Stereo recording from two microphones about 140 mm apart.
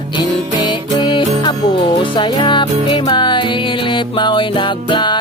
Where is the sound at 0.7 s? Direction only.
35° left (ahead or behind).